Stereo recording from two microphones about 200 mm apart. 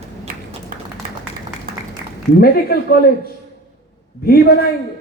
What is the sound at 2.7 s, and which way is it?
Speech, 50° left (ahead or behind).